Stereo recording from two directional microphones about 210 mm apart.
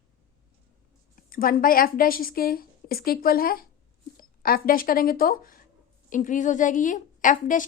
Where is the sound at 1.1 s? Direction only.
45° left (ahead or behind).